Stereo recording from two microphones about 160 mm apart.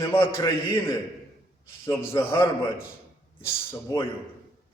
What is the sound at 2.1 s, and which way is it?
Speech, 15° left (ahead or behind).